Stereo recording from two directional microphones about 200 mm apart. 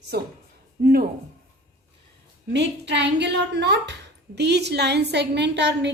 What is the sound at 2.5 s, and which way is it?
A woman's voice, 60° right (ahead or behind).